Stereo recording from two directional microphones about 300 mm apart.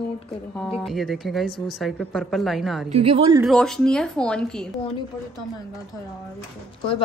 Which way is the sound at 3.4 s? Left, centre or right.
Centre.